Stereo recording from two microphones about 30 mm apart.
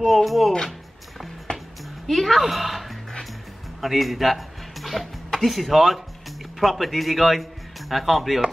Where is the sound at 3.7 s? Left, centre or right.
Centre.